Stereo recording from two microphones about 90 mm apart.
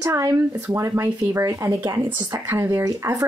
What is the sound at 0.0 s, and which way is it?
Speech, 35° right (ahead or behind).